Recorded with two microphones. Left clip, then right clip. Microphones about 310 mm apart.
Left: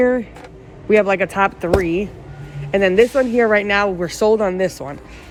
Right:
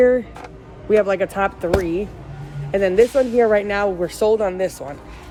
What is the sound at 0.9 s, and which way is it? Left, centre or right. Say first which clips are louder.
Speech: left 2 dB; centre.